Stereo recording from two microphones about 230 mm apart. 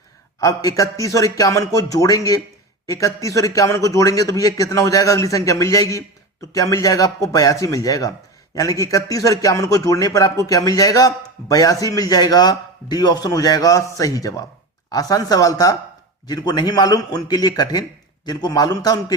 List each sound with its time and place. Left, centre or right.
0.3 s speech: centre